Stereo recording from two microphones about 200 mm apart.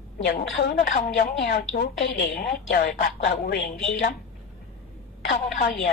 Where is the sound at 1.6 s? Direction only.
55° left (ahead or behind).